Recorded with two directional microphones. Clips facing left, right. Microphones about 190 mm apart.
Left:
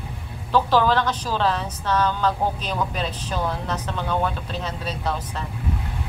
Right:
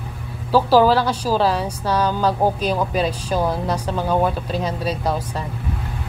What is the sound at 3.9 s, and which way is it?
Speech, 35° right (ahead or behind).